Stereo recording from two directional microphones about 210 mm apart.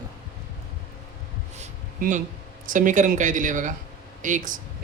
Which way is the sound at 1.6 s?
40° right (ahead or behind).